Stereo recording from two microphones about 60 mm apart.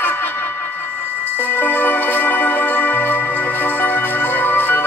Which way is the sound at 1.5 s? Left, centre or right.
Left.